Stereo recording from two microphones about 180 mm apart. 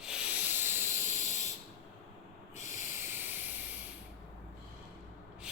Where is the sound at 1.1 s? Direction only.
40° left (ahead or behind).